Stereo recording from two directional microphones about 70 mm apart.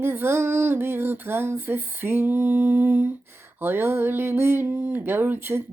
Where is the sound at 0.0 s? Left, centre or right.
Right.